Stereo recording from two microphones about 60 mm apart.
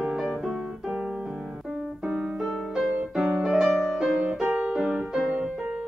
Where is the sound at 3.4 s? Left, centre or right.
Centre.